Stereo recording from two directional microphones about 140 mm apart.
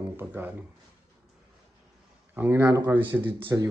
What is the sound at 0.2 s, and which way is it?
Speech, 15° right (ahead or behind).